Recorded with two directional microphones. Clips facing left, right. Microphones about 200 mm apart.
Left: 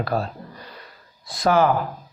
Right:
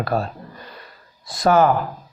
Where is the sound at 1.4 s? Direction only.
45° right (ahead or behind).